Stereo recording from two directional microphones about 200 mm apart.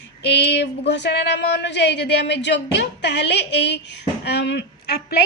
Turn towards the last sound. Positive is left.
turn(degrees=55)  # may be behind; listen again after turning